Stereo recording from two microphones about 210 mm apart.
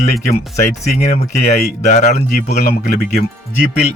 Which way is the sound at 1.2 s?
35° left (ahead or behind).